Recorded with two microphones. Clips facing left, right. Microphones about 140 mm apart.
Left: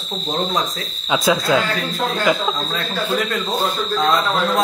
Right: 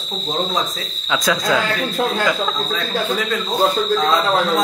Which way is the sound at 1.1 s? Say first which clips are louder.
Left 2 dB; 25° left (ahead or behind).